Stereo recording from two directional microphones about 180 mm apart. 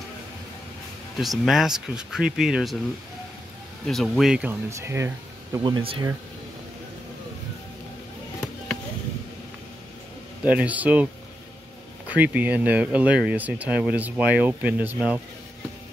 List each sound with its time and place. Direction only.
1.1 s speech: centre (ahead or behind)
3.8 s speech: centre (ahead or behind); by 5.6 s 15° right (ahead or behind)
5.6 s speech: 30° right (ahead or behind)
10.4 s speech: 10° right (ahead or behind)
12.1 s speech: 10° right (ahead or behind)